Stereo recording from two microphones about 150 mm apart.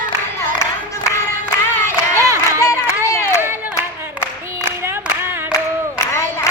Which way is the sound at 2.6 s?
20° left (ahead or behind).